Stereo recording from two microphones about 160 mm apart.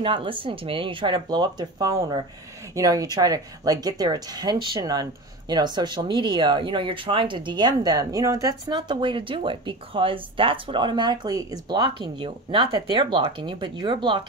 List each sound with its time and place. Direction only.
0.0 s speech: 35° right (ahead or behind)